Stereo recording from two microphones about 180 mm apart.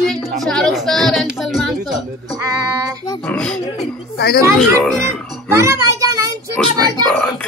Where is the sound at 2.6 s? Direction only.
20° right (ahead or behind).